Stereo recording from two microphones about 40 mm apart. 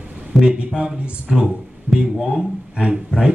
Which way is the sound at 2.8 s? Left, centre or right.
Centre.